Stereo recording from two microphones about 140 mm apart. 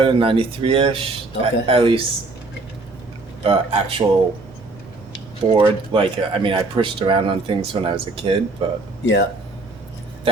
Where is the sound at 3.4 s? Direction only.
45° right (ahead or behind).